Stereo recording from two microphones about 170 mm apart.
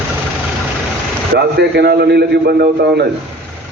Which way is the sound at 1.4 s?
70° right (ahead or behind).